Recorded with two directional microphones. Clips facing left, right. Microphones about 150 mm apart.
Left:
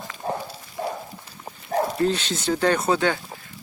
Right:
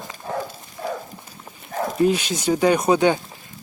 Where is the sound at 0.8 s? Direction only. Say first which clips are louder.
Even; 45° left (ahead or behind).